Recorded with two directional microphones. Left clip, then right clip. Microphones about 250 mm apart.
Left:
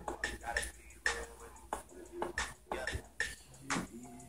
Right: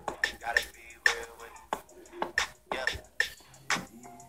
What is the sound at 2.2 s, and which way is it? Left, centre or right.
Beatboxing, right.